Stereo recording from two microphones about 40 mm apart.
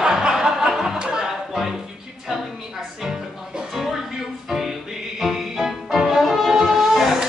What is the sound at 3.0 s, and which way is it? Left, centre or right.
Music, centre.